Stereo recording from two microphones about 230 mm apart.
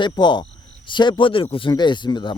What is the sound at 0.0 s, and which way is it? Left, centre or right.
Speech, centre.